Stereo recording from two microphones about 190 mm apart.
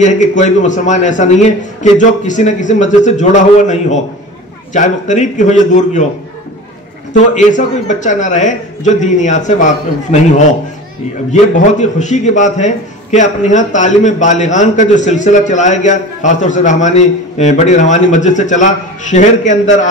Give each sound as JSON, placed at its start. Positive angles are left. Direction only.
{"t": 0.0, "sound": "a man's voice", "side_deg": 40}
{"t": 7.3, "sound": "a man's voice", "side_deg": 40}
{"t": 11.5, "sound": "a man's voice", "side_deg": 40}